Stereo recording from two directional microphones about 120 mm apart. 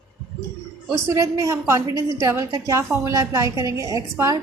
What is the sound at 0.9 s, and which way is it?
A woman's voice, 25° right (ahead or behind).